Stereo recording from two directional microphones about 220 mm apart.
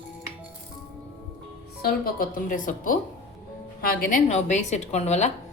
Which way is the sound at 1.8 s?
40° left (ahead or behind).